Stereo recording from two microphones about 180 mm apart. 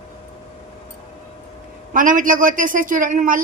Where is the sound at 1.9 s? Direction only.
45° right (ahead or behind).